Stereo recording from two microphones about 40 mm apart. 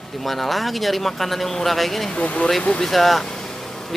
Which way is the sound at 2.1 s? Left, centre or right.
Left.